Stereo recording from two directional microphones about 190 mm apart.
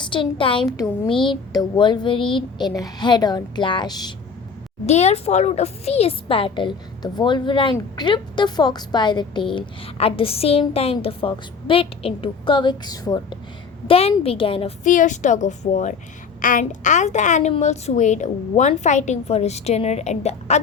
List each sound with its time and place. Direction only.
0.0 s a child's voice: 25° left (ahead or behind)
4.9 s a child's voice: 35° left (ahead or behind)
14.8 s a woman's voice: 40° left (ahead or behind)